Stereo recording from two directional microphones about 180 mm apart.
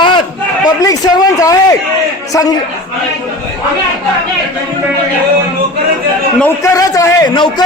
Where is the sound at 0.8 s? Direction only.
20° left (ahead or behind).